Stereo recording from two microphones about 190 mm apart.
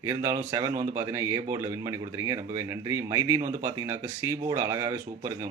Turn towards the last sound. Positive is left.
turn(degrees=-15)  # may be behind; listen again after turning